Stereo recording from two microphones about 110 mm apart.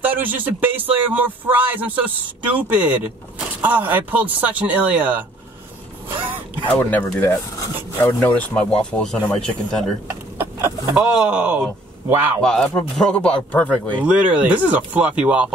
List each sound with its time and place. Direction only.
0.0 s speech: 15° right (ahead or behind)
6.2 s a sound: 20° right (ahead or behind)
6.8 s speech: 20° left (ahead or behind)
8.2 s a man's voice: 10° left (ahead or behind)
11.0 s speech: 10° right (ahead or behind)
12.4 s a man's voice: 5° left (ahead or behind)
14.0 s speech: 10° right (ahead or behind)